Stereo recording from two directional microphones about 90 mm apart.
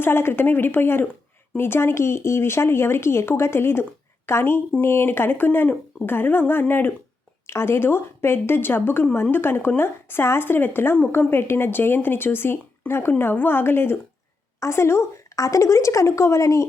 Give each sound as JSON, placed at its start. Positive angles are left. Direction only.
{"t": 0.0, "sound": "speech", "side_deg": 25}